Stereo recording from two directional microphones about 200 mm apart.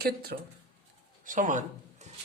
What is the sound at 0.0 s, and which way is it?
Speech, 50° right (ahead or behind).